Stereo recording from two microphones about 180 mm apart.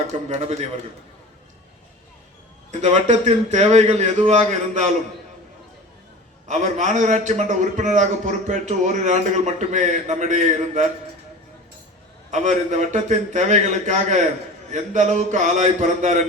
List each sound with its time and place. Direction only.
0.3 s a man's voice: 35° right (ahead or behind)
2.8 s a man's voice: 40° right (ahead or behind)
6.5 s a man's voice: 45° right (ahead or behind)
12.3 s a man's voice: 40° right (ahead or behind)